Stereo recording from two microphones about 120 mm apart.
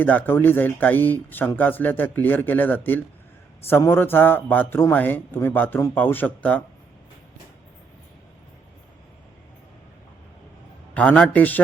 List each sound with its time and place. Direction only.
0.0 s speech: 15° left (ahead or behind)
10.9 s speech: 10° left (ahead or behind)